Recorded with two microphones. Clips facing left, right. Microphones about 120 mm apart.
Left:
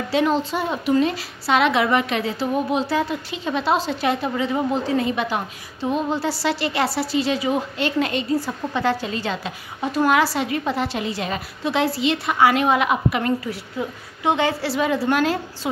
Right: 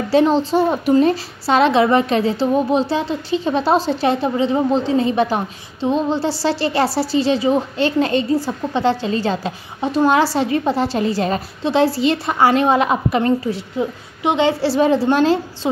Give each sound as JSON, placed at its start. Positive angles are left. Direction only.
{"t": 0.1, "sound": "a woman's voice", "side_deg": -30}